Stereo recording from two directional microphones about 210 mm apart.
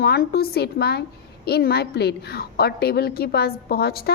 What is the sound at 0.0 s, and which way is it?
A woman's voice, 45° left (ahead or behind).